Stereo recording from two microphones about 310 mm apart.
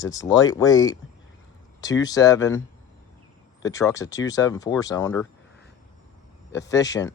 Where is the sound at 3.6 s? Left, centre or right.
Centre.